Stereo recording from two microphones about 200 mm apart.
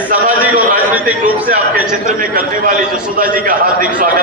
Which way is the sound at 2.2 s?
45° right (ahead or behind).